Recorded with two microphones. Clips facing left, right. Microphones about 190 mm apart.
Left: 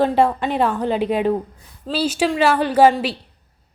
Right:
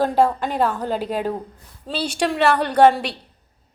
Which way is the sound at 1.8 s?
5° left (ahead or behind).